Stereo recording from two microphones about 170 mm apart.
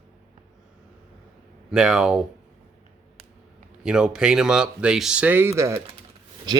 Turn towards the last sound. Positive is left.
turn(degrees=-25)  # may be behind; listen again after turning